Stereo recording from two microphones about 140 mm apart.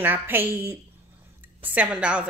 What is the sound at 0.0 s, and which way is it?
Speech, 15° right (ahead or behind).